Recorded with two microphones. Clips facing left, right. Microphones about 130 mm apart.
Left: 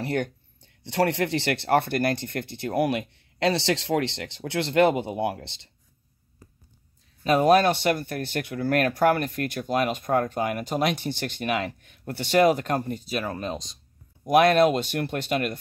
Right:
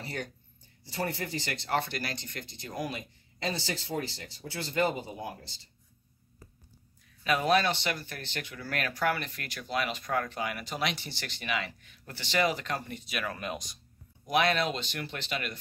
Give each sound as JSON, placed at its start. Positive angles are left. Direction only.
{"t": 0.0, "sound": "speech", "side_deg": 60}
{"t": 7.2, "sound": "speech", "side_deg": 45}
{"t": 14.2, "sound": "speech", "side_deg": 50}